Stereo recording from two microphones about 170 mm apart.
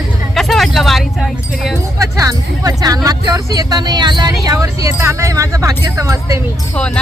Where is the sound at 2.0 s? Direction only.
20° right (ahead or behind).